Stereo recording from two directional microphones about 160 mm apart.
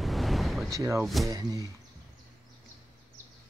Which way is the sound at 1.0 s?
Centre (ahead or behind).